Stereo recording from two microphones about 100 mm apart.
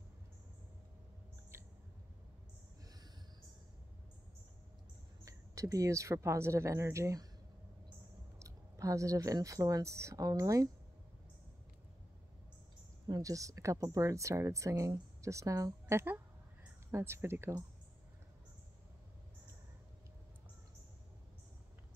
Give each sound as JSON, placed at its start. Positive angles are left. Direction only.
{"t": 1.5, "sound": "a sound", "side_deg": -25}
{"t": 5.2, "sound": "speech", "side_deg": -35}
{"t": 8.4, "sound": "speech", "side_deg": -35}
{"t": 13.0, "sound": "speech", "side_deg": -40}